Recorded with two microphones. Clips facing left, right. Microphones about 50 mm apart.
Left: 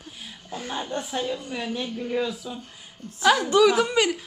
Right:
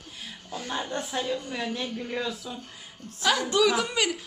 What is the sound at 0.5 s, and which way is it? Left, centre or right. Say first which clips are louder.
Speech: left 1 dB; centre.